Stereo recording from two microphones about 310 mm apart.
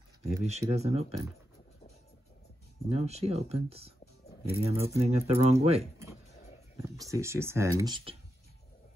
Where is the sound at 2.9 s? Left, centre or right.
Centre.